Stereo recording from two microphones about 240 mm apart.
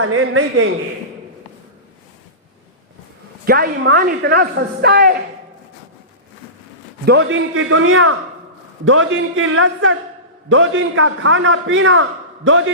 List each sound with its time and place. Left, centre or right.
0.0 s a man's voice: right
3.4 s a woman's voice: right
7.0 s a man's voice: right